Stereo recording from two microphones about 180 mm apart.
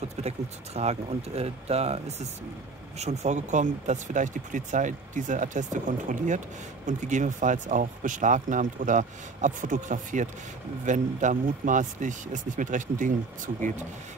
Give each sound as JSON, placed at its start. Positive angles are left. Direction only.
{"t": 0.2, "sound": "speech", "side_deg": -35}